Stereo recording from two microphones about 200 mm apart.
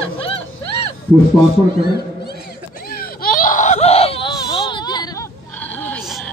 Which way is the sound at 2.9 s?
45° left (ahead or behind).